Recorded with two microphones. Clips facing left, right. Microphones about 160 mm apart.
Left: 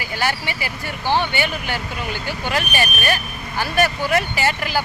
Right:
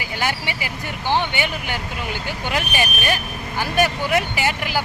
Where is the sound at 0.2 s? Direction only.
15° right (ahead or behind).